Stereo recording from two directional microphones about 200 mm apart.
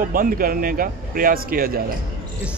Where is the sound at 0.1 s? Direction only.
45° right (ahead or behind).